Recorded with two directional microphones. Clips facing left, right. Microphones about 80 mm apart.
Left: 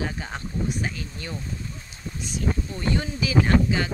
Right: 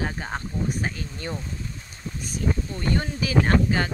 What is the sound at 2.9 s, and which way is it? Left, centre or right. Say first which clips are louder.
Speech: even; right.